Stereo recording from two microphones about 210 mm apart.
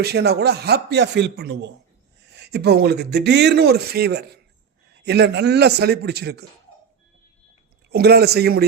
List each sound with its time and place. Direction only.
0.0 s speech: 50° right (ahead or behind)
7.9 s speech: 50° right (ahead or behind)